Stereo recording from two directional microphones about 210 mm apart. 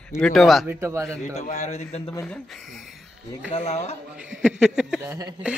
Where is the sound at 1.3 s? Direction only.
35° left (ahead or behind).